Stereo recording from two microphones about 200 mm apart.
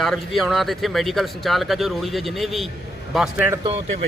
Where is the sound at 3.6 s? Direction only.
30° right (ahead or behind).